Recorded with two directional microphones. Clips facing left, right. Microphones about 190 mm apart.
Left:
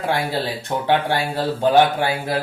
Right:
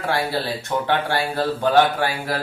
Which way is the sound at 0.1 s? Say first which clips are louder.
Even; 20° left (ahead or behind).